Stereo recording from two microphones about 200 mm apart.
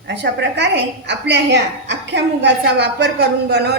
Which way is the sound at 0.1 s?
60° right (ahead or behind).